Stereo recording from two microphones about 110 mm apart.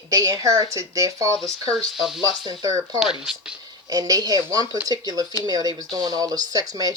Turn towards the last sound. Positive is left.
turn(degrees=-35)  # may be behind; listen again after turning